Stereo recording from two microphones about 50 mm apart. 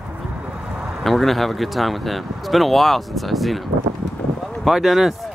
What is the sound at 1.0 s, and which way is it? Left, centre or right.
Speech, centre.